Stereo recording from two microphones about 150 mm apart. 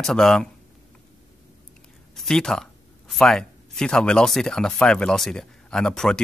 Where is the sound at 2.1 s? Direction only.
Centre (ahead or behind).